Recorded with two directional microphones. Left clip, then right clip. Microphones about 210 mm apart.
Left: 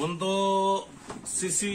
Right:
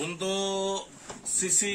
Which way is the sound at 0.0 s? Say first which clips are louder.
Left 3 dB; 55° right (ahead or behind).